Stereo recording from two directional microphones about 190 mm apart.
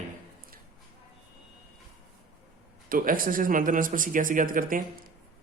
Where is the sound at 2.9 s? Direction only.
45° right (ahead or behind).